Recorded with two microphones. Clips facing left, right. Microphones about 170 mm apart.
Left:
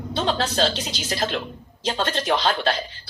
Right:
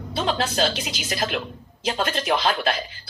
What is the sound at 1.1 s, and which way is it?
Speech, 30° left (ahead or behind).